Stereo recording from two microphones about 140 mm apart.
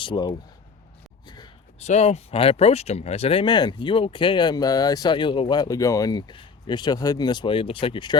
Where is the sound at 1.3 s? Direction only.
30° left (ahead or behind).